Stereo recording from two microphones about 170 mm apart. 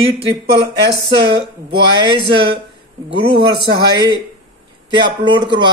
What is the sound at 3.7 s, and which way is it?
Speech, 20° right (ahead or behind).